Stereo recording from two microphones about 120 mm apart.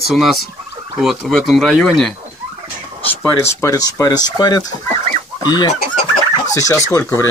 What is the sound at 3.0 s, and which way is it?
Speech, 15° left (ahead or behind).